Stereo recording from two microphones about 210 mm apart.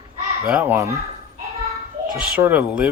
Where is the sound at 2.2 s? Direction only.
5° right (ahead or behind).